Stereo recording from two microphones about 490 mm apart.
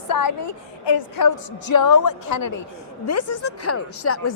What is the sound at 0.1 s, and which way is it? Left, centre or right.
A woman's voice, left.